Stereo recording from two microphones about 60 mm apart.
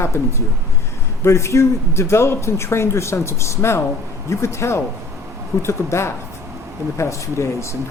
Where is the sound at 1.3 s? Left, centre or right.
Left.